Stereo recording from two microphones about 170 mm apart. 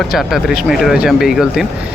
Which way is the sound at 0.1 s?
Centre (ahead or behind).